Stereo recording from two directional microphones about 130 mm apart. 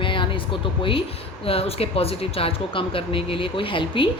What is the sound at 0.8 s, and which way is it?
A woman's voice, 45° left (ahead or behind).